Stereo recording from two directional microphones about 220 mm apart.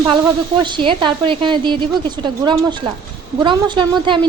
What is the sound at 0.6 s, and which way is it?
A woman's voice, 20° right (ahead or behind).